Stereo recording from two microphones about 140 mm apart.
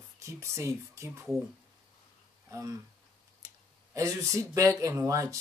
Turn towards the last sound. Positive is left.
turn(degrees=-20)  # may be behind; listen again after turning